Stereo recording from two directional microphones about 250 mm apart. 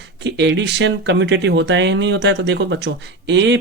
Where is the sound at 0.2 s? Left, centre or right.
Right.